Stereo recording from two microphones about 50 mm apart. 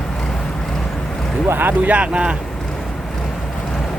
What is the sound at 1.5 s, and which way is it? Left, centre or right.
Speech, right.